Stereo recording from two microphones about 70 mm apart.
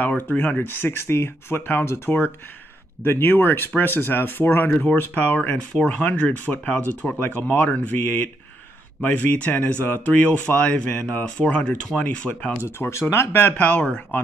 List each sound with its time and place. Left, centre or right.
0.3 s speech: left
5.7 s speech: centre
12.6 s speech: left; by 14.0 s centre